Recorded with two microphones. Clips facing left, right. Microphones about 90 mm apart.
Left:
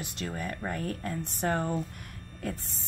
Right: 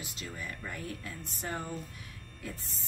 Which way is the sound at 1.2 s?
60° left (ahead or behind).